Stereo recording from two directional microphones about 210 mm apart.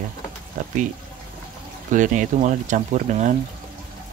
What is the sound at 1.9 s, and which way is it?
Speech, 35° right (ahead or behind).